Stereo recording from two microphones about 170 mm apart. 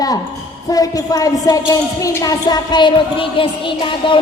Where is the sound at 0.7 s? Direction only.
20° left (ahead or behind).